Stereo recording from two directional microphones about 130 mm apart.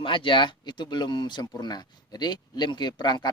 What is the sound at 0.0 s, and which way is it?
Speech, 40° left (ahead or behind).